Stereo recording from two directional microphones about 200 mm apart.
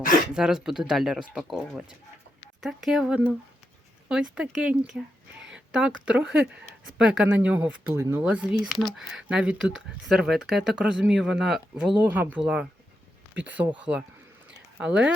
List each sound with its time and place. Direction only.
0.3 s speech: 5° right (ahead or behind)